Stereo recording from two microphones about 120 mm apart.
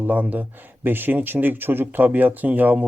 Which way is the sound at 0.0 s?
15° right (ahead or behind).